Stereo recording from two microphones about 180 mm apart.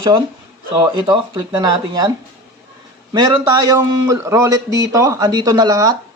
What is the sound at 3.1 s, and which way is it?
A man's voice, 20° right (ahead or behind).